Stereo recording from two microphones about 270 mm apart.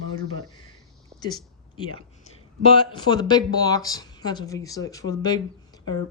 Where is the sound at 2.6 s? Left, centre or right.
Centre.